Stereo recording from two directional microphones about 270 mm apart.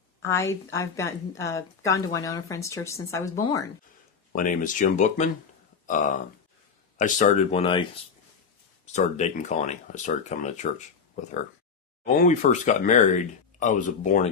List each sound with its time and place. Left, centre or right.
0.2 s a woman's voice: centre
4.3 s speech: left
8.9 s speech: left